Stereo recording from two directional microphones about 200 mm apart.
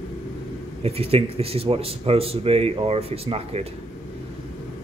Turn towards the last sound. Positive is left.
turn(degrees=-30)  # may be behind; listen again after turning